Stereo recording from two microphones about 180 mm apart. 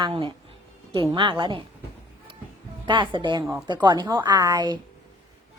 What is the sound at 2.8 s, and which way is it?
A woman's voice, 25° right (ahead or behind).